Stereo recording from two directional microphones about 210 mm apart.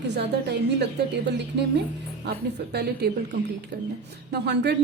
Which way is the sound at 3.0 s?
50° right (ahead or behind).